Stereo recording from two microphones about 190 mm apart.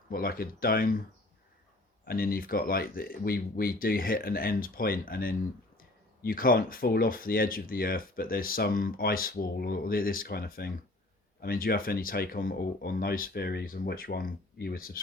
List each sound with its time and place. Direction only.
0.1 s speech: 50° left (ahead or behind)
2.0 s speech: 50° left (ahead or behind)